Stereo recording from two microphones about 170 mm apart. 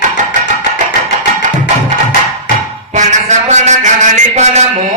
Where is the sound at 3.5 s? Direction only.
45° right (ahead or behind).